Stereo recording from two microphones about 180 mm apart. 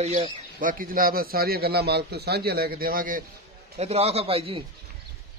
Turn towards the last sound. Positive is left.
turn(degrees=-30)  # may be behind; listen again after turning